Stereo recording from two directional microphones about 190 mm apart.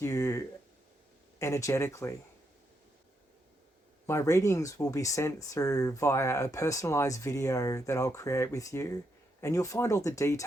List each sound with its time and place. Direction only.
0.0 s speech: 15° left (ahead or behind)
4.0 s speech: 15° left (ahead or behind)